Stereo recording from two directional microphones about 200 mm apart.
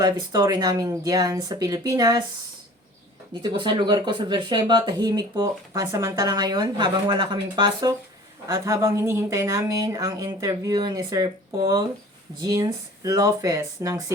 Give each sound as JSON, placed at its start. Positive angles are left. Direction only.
{"t": 0.0, "sound": "speech", "side_deg": -20}
{"t": 3.4, "sound": "speech", "side_deg": -25}